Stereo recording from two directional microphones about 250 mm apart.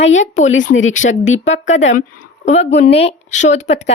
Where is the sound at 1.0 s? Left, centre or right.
Left.